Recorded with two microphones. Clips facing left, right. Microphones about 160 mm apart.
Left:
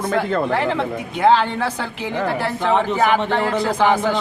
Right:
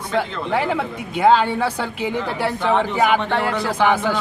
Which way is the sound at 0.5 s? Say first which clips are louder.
Left 1 dB; 10° right (ahead or behind).